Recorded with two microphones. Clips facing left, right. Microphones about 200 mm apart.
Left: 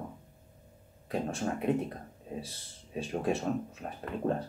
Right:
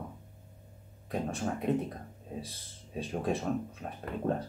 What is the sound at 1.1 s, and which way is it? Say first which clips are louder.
Speech: left 1 dB; centre (ahead or behind).